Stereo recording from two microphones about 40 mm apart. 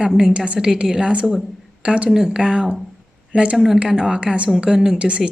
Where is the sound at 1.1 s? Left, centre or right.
Right.